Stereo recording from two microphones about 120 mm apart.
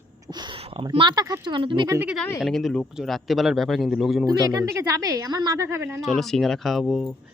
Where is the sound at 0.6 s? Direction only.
50° right (ahead or behind).